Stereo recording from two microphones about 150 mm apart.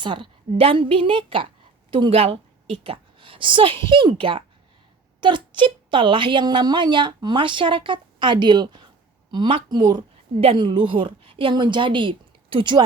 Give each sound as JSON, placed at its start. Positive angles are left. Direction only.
{"t": 0.0, "sound": "a woman's voice", "side_deg": -35}